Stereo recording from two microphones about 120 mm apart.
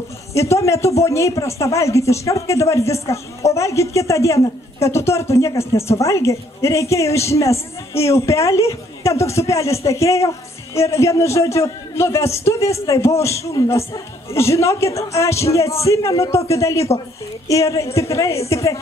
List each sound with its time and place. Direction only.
0.3 s a woman's voice: 25° left (ahead or behind)